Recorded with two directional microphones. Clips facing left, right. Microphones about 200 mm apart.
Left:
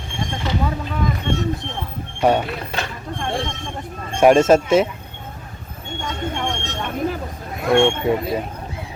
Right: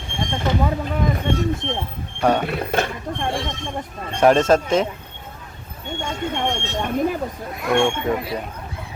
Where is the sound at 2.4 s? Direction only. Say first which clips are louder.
Right 5 dB; 50° right (ahead or behind).